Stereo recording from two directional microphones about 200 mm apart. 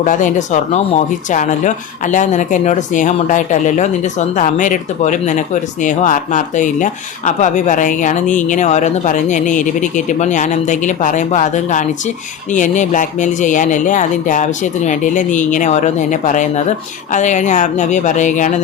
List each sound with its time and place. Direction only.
0.0 s speech: 40° left (ahead or behind)